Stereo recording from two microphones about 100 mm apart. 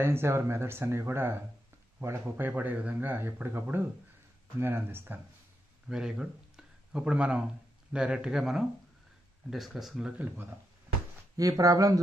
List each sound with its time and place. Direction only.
0.0 s a man's voice: 25° right (ahead or behind)
5.9 s a man's voice: 5° right (ahead or behind)
10.1 s a man's voice: 20° right (ahead or behind)
11.3 s speech: 35° right (ahead or behind)